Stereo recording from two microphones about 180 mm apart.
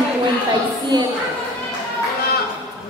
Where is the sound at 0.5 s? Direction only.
25° right (ahead or behind).